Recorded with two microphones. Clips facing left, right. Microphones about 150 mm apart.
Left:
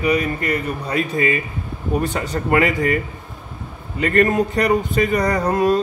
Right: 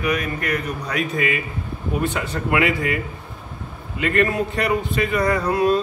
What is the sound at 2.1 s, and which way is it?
Speech, 40° left (ahead or behind).